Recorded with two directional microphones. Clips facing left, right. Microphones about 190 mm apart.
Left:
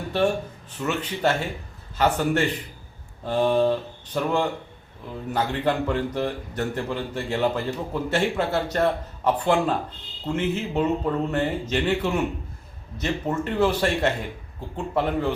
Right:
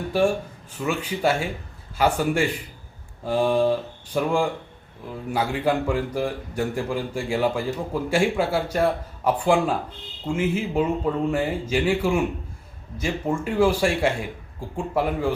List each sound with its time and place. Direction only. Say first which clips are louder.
0.1 s a man's voice: right 1 dB; 10° right (ahead or behind)